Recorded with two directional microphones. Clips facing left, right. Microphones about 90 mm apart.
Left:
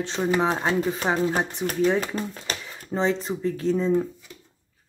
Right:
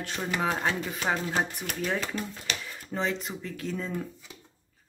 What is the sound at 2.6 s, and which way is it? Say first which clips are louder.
Speech: left 7 dB; 30° left (ahead or behind).